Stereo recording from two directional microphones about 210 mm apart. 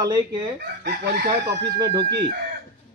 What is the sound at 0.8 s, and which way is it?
Chicken, 50° right (ahead or behind).